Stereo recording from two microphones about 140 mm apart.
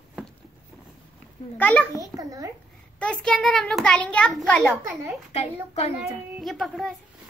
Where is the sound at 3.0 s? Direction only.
5° left (ahead or behind).